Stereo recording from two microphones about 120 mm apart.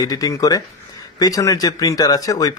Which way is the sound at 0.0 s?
30° left (ahead or behind).